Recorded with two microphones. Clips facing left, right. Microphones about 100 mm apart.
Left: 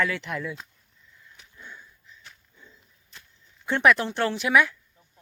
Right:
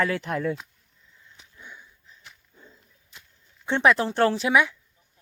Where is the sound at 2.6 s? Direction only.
40° right (ahead or behind).